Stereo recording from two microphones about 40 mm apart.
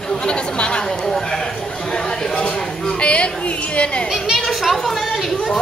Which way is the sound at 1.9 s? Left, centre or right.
Centre.